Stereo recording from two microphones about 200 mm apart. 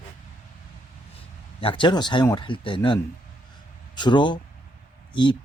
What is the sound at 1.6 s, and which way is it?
Speech, 25° left (ahead or behind).